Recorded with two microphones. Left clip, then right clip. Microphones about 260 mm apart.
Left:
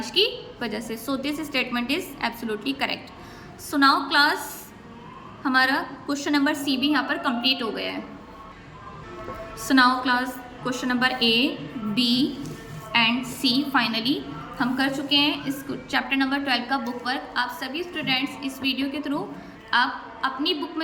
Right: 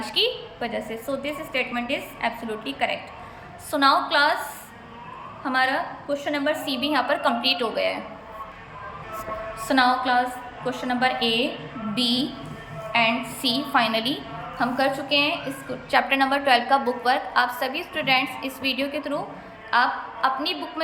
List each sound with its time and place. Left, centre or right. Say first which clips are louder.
0.1 s a woman's voice: left 1 dB; centre
5.4 s a woman's voice: left 1 dB; centre
9.6 s a woman's voice: left 1 dB; centre
15.5 s a woman's voice: left 3 dB; centre
15.9 s a woman's voice: right 4 dB; centre